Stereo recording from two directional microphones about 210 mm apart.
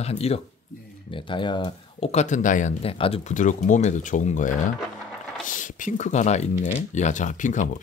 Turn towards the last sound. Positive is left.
turn(degrees=35)  # may be behind; listen again after turning